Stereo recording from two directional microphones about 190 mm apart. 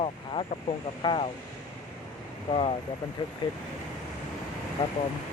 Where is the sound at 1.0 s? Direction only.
25° left (ahead or behind).